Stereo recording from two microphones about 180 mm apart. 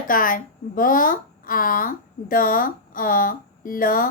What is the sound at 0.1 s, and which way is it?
A woman's voice, 50° left (ahead or behind).